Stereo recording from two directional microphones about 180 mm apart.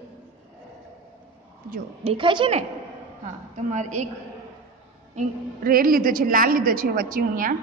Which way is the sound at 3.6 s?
40° right (ahead or behind).